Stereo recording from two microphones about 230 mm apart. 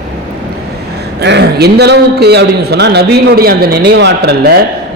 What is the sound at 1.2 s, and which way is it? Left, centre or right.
A man's voice, right.